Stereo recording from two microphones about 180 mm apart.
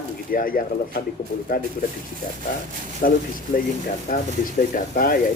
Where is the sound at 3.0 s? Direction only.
50° left (ahead or behind).